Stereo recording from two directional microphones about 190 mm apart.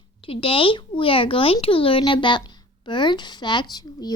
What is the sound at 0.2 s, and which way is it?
Speech, 30° left (ahead or behind).